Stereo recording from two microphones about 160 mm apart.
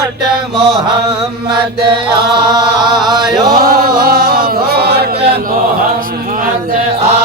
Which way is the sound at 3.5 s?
65° right (ahead or behind).